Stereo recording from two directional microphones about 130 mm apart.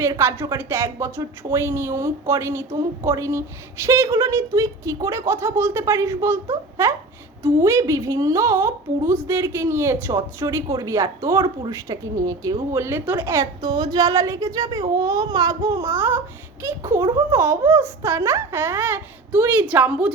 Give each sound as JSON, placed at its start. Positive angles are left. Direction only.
{"t": 0.0, "sound": "a woman's voice", "side_deg": -20}
{"t": 13.6, "sound": "a woman's voice", "side_deg": -35}